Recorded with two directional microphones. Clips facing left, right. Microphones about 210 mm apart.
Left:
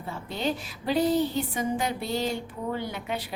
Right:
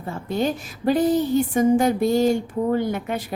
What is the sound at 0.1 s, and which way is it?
A woman's voice, 50° right (ahead or behind).